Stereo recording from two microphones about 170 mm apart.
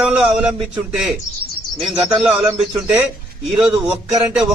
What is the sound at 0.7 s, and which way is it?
A man's voice, 5° right (ahead or behind).